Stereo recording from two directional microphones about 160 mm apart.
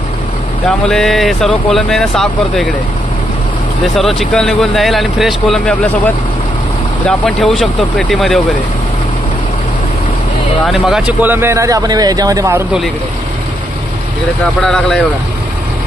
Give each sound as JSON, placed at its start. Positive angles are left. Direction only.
{"t": 0.7, "sound": "speech", "side_deg": 5}
{"t": 3.8, "sound": "speech", "side_deg": 0}
{"t": 10.6, "sound": "speech", "side_deg": -5}
{"t": 14.6, "sound": "speech", "side_deg": 5}